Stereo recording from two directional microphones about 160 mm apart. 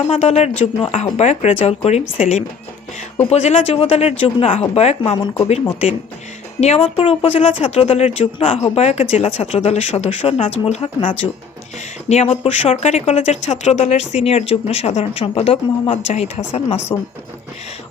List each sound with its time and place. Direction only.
0.1 s speech: 45° left (ahead or behind)